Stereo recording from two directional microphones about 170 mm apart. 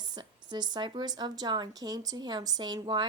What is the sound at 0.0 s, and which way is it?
A woman's voice, 25° right (ahead or behind).